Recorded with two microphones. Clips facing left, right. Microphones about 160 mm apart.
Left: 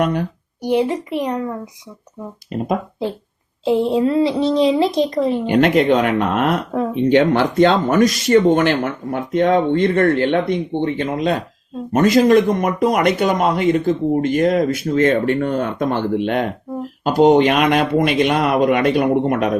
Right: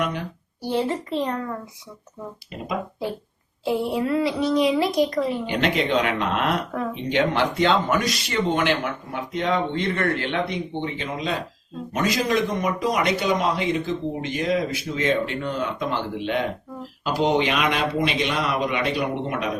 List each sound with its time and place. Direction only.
0.0 s speech: 45° left (ahead or behind)
0.6 s a child's voice: 15° left (ahead or behind)
3.6 s speech: 20° left (ahead or behind)
5.5 s speech: 50° left (ahead or behind)